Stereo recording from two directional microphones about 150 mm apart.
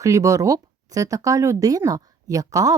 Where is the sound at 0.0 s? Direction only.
20° right (ahead or behind).